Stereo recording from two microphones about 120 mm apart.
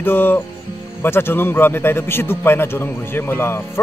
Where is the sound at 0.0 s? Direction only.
15° left (ahead or behind).